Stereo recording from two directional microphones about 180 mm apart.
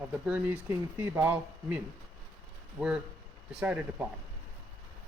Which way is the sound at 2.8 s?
5° right (ahead or behind).